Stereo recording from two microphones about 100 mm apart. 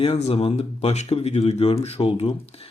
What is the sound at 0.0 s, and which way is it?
Speech, 90° left.